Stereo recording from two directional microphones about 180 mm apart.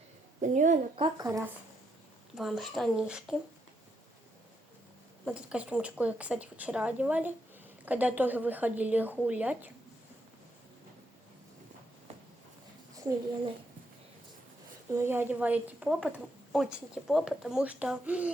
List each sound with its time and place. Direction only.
0.4 s a woman's voice: 45° right (ahead or behind)
1.0 s speech: 20° right (ahead or behind)
2.3 s speech: centre (ahead or behind)
5.2 s speech: 5° right (ahead or behind)
14.9 s speech: 15° right (ahead or behind)